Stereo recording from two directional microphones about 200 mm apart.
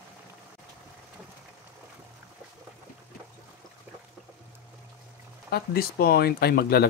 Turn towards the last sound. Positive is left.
turn(degrees=50)  # may be behind; listen again after turning